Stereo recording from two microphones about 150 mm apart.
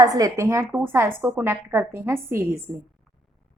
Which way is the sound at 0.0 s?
25° right (ahead or behind).